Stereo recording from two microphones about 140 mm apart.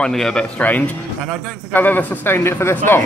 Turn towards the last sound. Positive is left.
turn(degrees=15)  # may be behind; listen again after turning